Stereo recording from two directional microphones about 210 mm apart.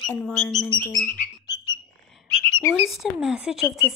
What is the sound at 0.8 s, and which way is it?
Bird, 10° left (ahead or behind).